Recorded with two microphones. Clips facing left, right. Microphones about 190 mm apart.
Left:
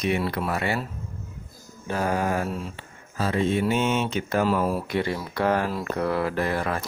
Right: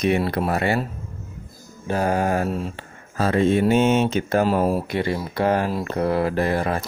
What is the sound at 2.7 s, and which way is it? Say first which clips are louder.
Speech: right 5 dB; 60° right (ahead or behind).